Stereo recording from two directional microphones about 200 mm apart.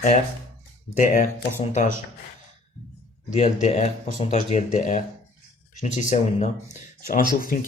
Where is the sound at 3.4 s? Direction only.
35° left (ahead or behind).